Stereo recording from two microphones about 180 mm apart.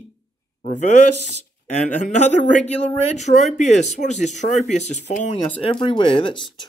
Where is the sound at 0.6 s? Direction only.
40° left (ahead or behind).